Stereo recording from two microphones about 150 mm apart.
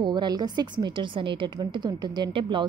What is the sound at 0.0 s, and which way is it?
A woman's voice, 30° right (ahead or behind).